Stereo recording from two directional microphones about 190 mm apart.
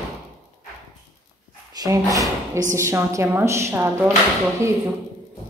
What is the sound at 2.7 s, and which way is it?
A woman's voice, 15° right (ahead or behind).